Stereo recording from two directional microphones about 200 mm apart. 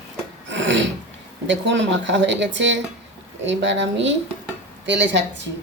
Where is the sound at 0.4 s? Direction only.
65° right (ahead or behind).